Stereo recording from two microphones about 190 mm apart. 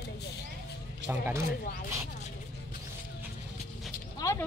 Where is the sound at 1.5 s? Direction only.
50° left (ahead or behind).